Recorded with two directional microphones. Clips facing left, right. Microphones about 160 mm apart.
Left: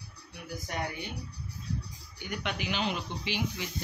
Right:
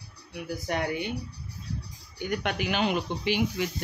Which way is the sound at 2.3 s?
50° right (ahead or behind).